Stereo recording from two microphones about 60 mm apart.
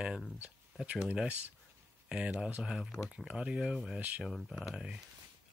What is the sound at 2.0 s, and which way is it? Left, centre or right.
Speech, centre.